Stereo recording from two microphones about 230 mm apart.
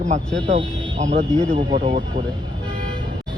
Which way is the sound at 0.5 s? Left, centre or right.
Right.